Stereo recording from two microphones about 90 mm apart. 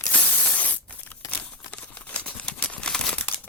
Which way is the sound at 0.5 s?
15° left (ahead or behind).